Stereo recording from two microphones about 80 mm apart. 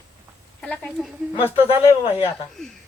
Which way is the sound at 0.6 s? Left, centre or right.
Centre.